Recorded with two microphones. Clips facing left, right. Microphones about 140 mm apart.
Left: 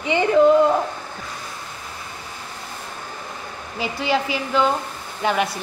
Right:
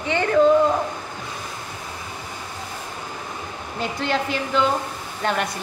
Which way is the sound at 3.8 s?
10° left (ahead or behind).